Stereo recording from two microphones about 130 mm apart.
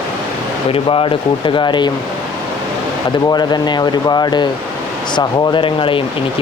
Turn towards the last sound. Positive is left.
turn(degrees=40)  # may be behind; listen again after turning